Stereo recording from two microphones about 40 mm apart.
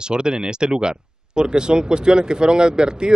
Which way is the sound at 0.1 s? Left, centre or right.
Right.